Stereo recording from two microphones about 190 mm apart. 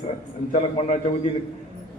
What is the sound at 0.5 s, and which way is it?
Speech, 35° left (ahead or behind).